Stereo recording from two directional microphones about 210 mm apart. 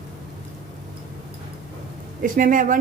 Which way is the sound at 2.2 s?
40° right (ahead or behind).